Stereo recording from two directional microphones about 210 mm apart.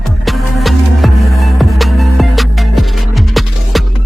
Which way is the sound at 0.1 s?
Centre (ahead or behind).